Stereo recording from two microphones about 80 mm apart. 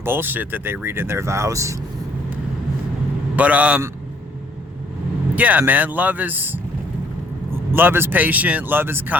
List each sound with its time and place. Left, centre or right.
0.0 s speech: right
3.3 s a man's voice: centre
5.3 s speech: centre